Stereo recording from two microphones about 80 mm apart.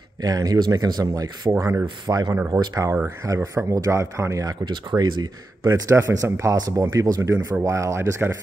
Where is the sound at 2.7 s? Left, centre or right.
Right.